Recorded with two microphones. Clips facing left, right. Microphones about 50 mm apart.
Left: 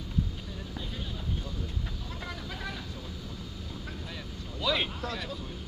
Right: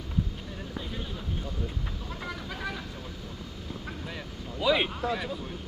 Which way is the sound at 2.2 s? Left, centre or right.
Centre.